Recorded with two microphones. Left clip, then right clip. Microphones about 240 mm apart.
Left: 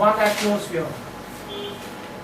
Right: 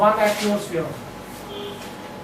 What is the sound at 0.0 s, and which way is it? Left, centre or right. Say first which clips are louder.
Speech: right 1 dB; centre.